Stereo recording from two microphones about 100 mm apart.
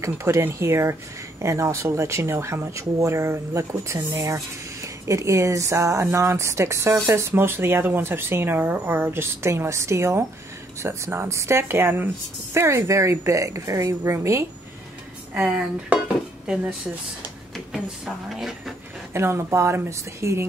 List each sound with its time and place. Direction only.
0.0 s a woman's voice: 30° right (ahead or behind)
15.3 s speech: 15° right (ahead or behind)
18.0 s speech: 5° right (ahead or behind)
19.1 s speech: 25° right (ahead or behind)